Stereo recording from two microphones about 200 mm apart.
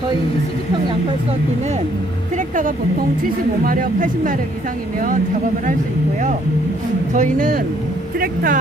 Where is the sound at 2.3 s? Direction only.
40° right (ahead or behind).